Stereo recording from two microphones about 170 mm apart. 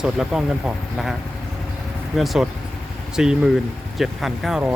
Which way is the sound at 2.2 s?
Centre (ahead or behind).